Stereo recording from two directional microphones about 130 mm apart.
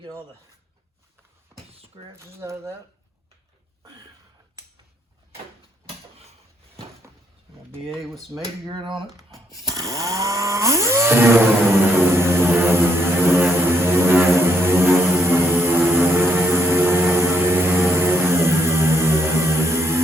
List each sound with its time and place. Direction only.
2.1 s speech: 20° right (ahead or behind)
7.9 s speech: centre (ahead or behind)
8.6 s speech: 40° right (ahead or behind)
9.7 s chainsaw: 25° right (ahead or behind)
16.1 s vehicle: 15° right (ahead or behind)